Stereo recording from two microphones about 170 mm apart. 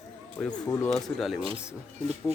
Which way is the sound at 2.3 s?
40° right (ahead or behind).